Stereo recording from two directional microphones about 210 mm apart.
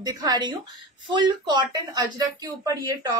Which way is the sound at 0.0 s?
20° right (ahead or behind).